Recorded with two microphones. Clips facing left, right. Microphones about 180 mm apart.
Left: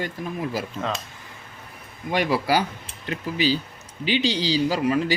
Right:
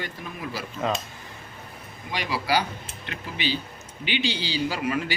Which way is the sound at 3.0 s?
40° left (ahead or behind).